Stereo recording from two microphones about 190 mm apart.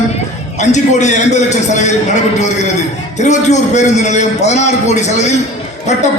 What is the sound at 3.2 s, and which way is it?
A man's voice, 40° left (ahead or behind).